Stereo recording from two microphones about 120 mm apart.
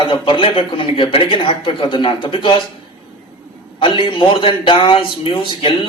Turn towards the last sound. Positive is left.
turn(degrees=45)  # may be behind; listen again after turning